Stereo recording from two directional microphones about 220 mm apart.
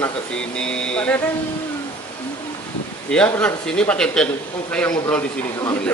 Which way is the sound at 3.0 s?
5° left (ahead or behind).